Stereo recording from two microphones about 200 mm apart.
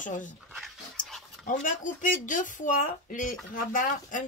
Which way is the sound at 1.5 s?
40° left (ahead or behind).